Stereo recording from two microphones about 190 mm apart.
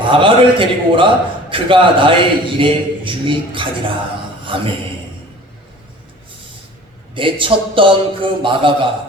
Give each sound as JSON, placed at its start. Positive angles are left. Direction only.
{"t": 0.1, "sound": "a man's voice", "side_deg": -25}
{"t": 7.1, "sound": "a man's voice", "side_deg": -25}